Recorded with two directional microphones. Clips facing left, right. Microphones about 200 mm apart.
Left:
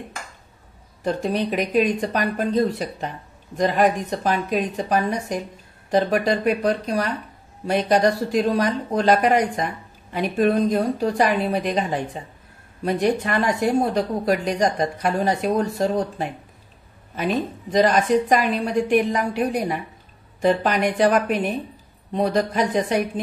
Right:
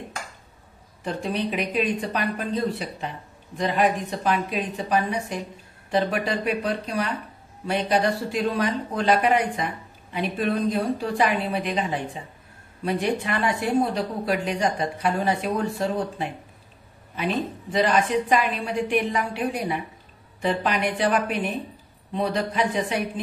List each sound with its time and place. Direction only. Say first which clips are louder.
1.0 s a woman's voice: left 4 dB; 40° left (ahead or behind)
12.8 s a woman's voice: left 4 dB; 40° left (ahead or behind)
17.6 s a woman's voice: left 4 dB; 40° left (ahead or behind)